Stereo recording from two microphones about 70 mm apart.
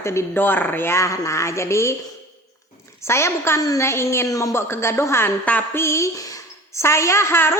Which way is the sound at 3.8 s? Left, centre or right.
Left.